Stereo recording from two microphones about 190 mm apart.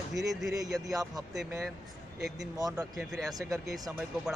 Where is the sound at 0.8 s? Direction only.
20° right (ahead or behind).